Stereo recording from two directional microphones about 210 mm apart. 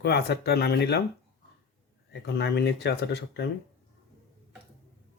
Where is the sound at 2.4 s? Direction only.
55° left (ahead or behind).